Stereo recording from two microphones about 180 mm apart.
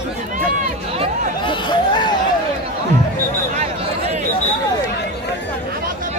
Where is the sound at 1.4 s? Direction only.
25° left (ahead or behind).